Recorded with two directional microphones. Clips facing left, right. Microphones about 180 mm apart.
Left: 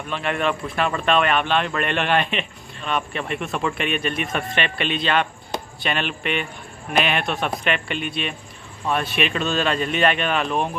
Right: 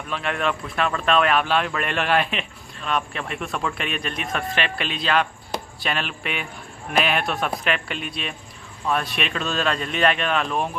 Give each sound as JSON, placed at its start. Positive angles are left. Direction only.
{"t": 0.1, "sound": "speech", "side_deg": 0}